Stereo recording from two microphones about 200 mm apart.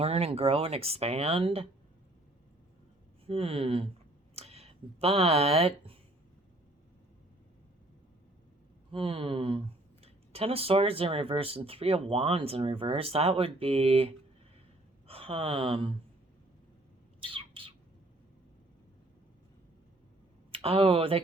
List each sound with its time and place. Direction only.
0.0 s speech: 30° right (ahead or behind)
3.2 s speech: 30° right (ahead or behind)
8.9 s speech: 30° right (ahead or behind)
17.2 s bird: 25° right (ahead or behind)
20.5 s speech: 30° right (ahead or behind)